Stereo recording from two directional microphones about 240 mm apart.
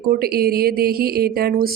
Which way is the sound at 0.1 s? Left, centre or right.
Right.